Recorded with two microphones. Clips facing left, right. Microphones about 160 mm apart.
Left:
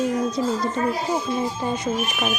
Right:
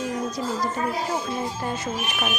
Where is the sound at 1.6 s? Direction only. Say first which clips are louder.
Left 4 dB; 15° left (ahead or behind).